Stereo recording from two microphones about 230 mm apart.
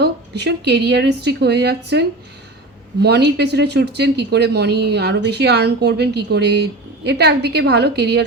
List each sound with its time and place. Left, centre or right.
0.0 s speech: right